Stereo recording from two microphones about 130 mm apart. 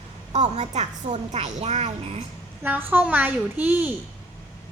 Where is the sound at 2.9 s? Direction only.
10° right (ahead or behind).